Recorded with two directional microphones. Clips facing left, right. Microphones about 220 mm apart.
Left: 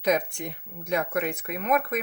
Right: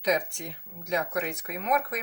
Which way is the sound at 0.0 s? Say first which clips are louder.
Left 3 dB; 55° left (ahead or behind).